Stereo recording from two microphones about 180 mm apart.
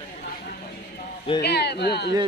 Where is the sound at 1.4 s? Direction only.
65° left (ahead or behind).